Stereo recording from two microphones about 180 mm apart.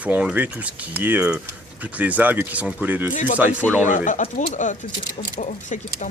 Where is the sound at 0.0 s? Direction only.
5° right (ahead or behind).